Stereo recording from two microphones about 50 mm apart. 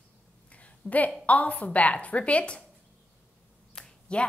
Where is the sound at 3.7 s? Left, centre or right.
Centre.